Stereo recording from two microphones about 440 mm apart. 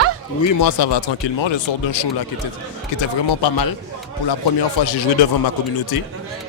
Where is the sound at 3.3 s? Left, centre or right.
Left.